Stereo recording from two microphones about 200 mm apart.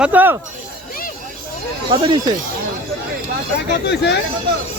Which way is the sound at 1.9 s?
25° right (ahead or behind).